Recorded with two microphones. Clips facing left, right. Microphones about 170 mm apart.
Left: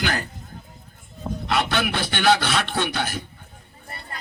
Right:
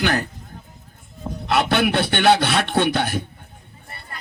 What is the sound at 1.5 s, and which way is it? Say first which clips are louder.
Speech: right 5 dB; 60° right (ahead or behind).